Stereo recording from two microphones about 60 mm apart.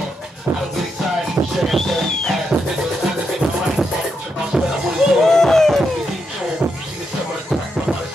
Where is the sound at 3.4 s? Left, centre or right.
Right.